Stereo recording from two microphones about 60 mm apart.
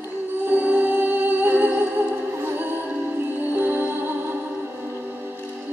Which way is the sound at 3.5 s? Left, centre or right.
Right.